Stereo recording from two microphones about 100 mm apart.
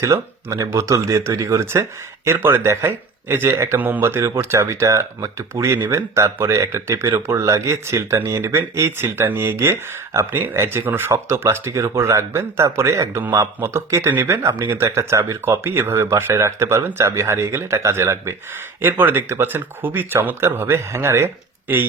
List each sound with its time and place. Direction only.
0.0 s speech: 30° right (ahead or behind)